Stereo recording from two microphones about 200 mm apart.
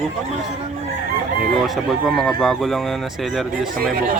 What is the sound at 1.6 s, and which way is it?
Speech, centre (ahead or behind).